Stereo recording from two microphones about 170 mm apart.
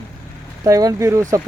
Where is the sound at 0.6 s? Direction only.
20° right (ahead or behind).